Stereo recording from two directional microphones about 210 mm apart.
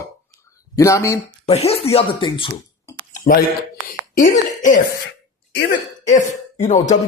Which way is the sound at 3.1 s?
40° left (ahead or behind).